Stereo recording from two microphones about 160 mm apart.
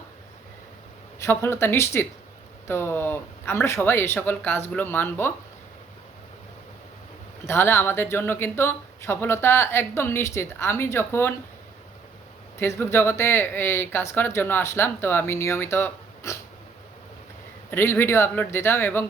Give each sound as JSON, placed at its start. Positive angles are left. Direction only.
{"t": 1.2, "sound": "speech", "side_deg": 15}
{"t": 7.4, "sound": "speech", "side_deg": 15}
{"t": 12.5, "sound": "speech", "side_deg": 15}
{"t": 17.7, "sound": "speech", "side_deg": 15}